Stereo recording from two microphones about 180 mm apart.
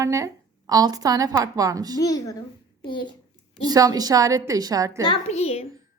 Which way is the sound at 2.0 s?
20° left (ahead or behind).